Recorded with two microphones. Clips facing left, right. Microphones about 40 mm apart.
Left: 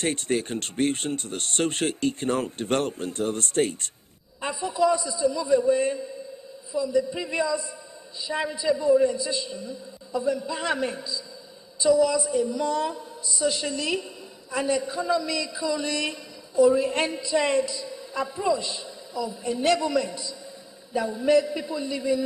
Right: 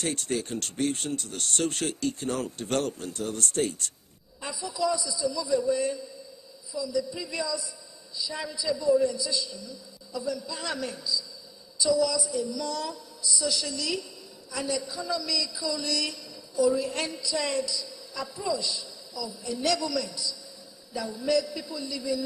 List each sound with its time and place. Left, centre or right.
0.0 s a man's voice: left